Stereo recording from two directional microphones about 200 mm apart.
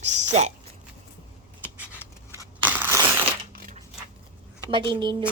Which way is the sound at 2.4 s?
10° right (ahead or behind).